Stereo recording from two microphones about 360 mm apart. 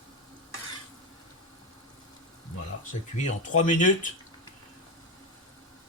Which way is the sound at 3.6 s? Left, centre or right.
Left.